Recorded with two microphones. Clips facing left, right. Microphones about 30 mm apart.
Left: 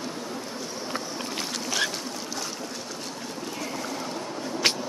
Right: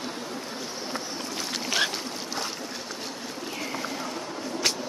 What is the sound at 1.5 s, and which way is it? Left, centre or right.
Boat, centre.